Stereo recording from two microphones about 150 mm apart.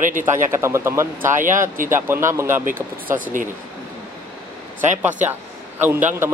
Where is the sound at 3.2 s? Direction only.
65° right (ahead or behind).